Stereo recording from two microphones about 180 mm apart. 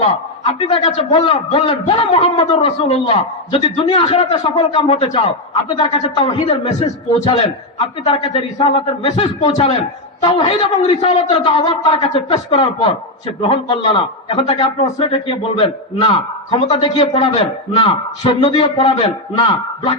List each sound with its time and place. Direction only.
0.0 s a man's voice: 30° left (ahead or behind)